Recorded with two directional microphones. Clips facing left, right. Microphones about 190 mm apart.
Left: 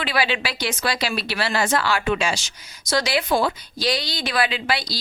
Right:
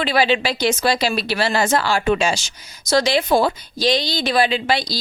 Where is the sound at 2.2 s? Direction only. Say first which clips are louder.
Right 4 dB; 25° right (ahead or behind).